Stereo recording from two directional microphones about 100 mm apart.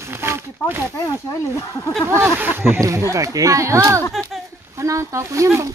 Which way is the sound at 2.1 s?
20° right (ahead or behind).